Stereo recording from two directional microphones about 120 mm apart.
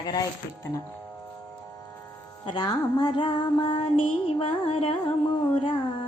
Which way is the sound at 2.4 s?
35° left (ahead or behind).